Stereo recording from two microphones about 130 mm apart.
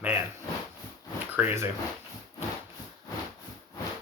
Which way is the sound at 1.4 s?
15° right (ahead or behind).